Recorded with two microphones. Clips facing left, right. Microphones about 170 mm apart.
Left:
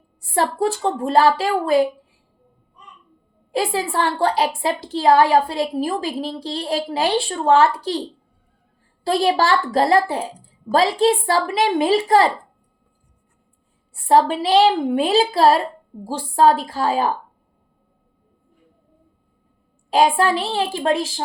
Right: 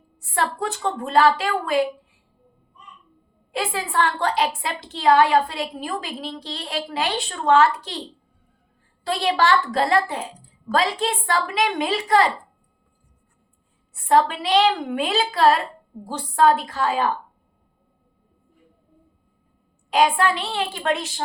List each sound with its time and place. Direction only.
0.2 s a woman's voice: 30° left (ahead or behind)
3.5 s a woman's voice: 35° left (ahead or behind)
9.0 s a woman's voice: 35° left (ahead or behind)
13.9 s a woman's voice: 35° left (ahead or behind)
19.9 s a woman's voice: 35° left (ahead or behind)